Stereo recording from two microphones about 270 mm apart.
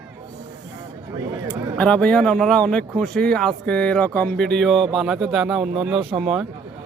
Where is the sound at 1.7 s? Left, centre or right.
Centre.